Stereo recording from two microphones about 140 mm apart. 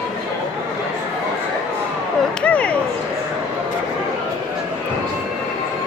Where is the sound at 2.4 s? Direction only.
10° left (ahead or behind).